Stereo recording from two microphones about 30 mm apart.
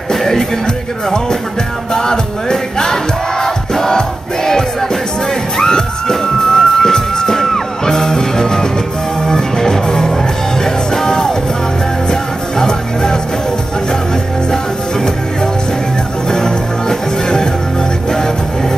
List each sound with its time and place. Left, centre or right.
0.1 s music: centre
2.0 s music: centre
5.6 s music: left
16.3 s music: left